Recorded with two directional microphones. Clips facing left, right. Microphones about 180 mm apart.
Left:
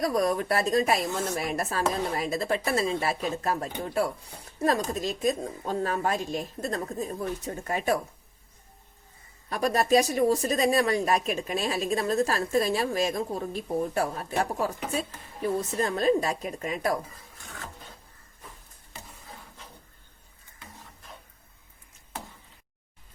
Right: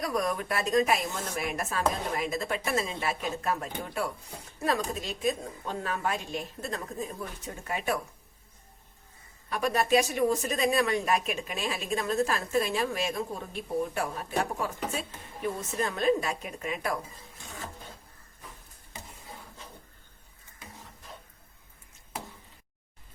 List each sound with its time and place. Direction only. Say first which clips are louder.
0.0 s speech: left 5 dB; 35° left (ahead or behind)
9.5 s speech: left 2 dB; 40° left (ahead or behind)
15.8 s speech: left 1 dB; 35° left (ahead or behind)